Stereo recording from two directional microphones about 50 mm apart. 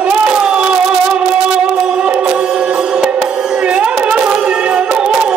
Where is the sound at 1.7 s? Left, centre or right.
Centre.